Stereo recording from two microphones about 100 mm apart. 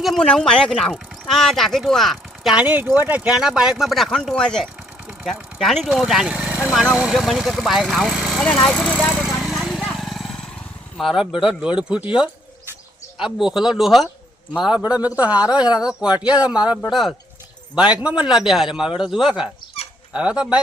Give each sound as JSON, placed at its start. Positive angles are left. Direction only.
{"t": 0.0, "sound": "speech", "side_deg": 5}
{"t": 2.6, "sound": "a man's voice", "side_deg": -15}
{"t": 3.3, "sound": "a man's voice", "side_deg": -5}
{"t": 9.2, "sound": "vehicle", "side_deg": -5}
{"t": 10.9, "sound": "a man's voice", "side_deg": -5}